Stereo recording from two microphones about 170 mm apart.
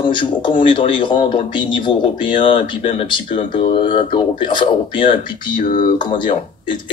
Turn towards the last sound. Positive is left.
turn(degrees=30)  # may be behind; listen again after turning